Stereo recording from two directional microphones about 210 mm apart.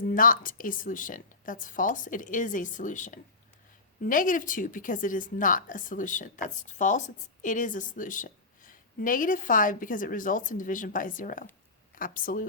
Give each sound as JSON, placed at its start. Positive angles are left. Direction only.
{"t": 0.1, "sound": "a woman's voice", "side_deg": 40}